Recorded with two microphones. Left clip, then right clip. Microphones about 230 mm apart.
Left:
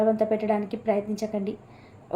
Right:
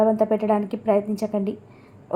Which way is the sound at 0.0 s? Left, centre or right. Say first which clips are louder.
Right 4 dB; right.